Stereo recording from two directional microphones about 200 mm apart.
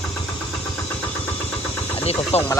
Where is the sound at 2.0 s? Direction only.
30° left (ahead or behind).